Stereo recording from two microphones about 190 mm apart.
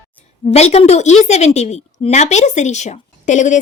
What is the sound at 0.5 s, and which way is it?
A woman's voice, 35° left (ahead or behind).